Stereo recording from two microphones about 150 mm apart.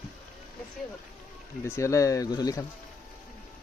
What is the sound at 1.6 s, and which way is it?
Speech, 20° left (ahead or behind).